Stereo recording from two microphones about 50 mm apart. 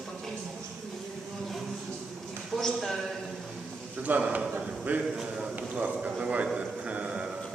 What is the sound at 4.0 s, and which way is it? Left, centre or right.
A man's voice, right.